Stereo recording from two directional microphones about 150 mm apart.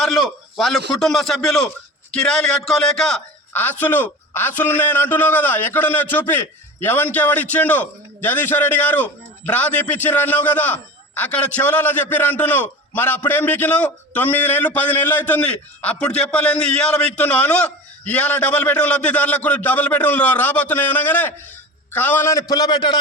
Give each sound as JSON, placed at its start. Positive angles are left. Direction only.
{"t": 0.0, "sound": "a man's voice", "side_deg": 0}